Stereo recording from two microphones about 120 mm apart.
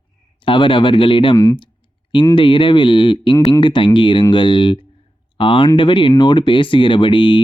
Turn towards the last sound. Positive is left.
turn(degrees=45)  # may be behind; listen again after turning